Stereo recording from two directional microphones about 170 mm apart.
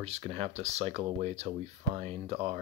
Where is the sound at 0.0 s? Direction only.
40° right (ahead or behind).